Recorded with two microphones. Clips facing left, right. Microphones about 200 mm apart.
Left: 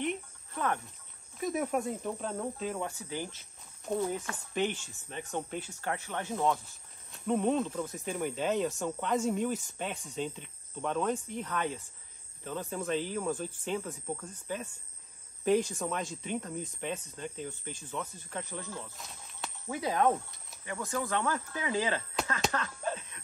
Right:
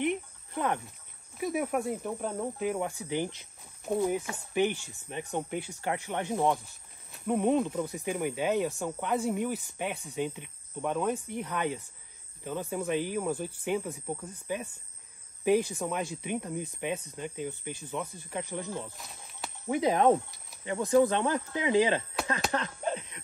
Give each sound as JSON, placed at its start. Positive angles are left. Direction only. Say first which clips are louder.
{"t": 0.0, "sound": "music", "louder": "right 4 dB", "side_deg": -15}
{"t": 1.4, "sound": "speech", "louder": "right 1 dB", "side_deg": -10}
{"t": 22.5, "sound": "a sound", "louder": "right 3 dB", "side_deg": -20}